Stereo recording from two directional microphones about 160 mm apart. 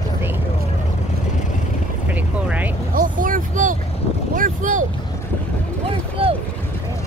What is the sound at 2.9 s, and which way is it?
Vehicle, 60° right (ahead or behind).